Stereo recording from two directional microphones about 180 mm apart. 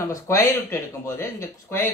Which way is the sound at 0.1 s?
15° left (ahead or behind).